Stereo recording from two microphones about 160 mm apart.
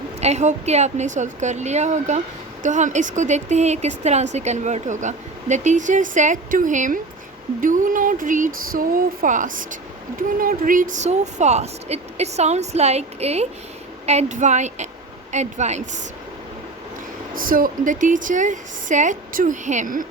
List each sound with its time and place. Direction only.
0.2 s a woman's voice: 45° right (ahead or behind)
17.3 s a woman's voice: 60° right (ahead or behind)